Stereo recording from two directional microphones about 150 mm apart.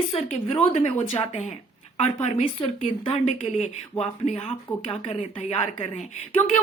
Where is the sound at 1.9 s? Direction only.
40° left (ahead or behind).